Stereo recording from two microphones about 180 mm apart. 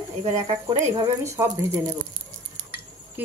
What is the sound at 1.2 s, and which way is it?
Speech, 15° right (ahead or behind).